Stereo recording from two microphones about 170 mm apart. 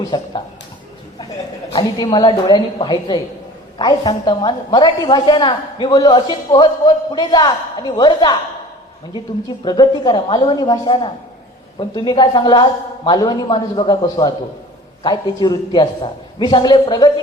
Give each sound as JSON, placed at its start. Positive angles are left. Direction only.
{"t": 0.0, "sound": "a woman's voice", "side_deg": 25}
{"t": 1.7, "sound": "a woman's voice", "side_deg": 25}